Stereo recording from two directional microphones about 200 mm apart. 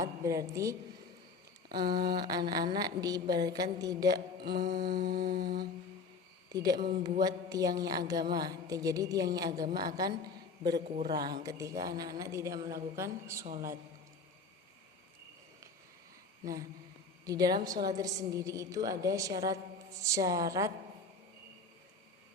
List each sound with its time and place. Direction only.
0.0 s a woman's voice: 15° right (ahead or behind)
4.6 s humming: 45° right (ahead or behind)
6.5 s a woman's voice: 20° right (ahead or behind)
16.4 s a sound: 15° right (ahead or behind)
17.2 s a woman's voice: 20° right (ahead or behind)